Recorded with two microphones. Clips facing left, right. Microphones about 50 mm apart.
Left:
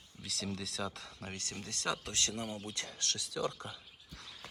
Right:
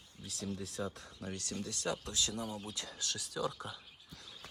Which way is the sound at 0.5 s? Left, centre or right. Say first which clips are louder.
Right 1 dB; left.